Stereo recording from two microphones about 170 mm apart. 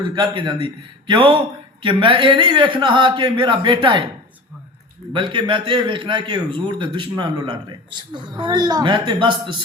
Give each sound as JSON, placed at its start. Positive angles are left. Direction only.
{"t": 0.1, "sound": "a man's voice", "side_deg": -25}
{"t": 5.1, "sound": "a man's voice", "side_deg": -30}